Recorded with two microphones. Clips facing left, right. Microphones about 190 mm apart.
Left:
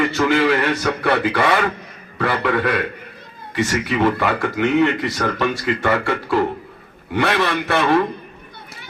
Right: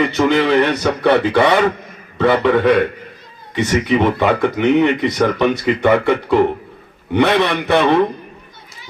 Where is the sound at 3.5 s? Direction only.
20° right (ahead or behind).